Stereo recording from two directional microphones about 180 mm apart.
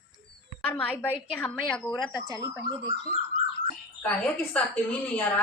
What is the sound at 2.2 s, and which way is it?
Speech, 20° right (ahead or behind).